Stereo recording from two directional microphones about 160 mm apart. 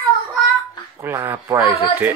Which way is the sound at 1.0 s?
15° right (ahead or behind).